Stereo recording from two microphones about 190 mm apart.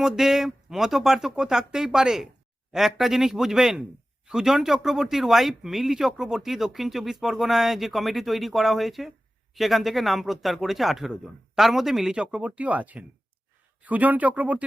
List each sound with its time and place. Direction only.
0.0 s speech: centre (ahead or behind)